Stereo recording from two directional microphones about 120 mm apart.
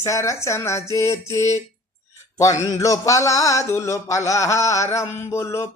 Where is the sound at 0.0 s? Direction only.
25° left (ahead or behind).